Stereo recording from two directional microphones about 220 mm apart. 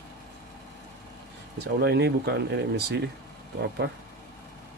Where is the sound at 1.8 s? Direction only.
50° right (ahead or behind).